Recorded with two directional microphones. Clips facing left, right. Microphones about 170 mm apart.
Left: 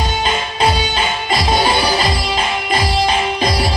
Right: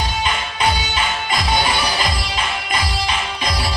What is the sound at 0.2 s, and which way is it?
Music, 30° left (ahead or behind).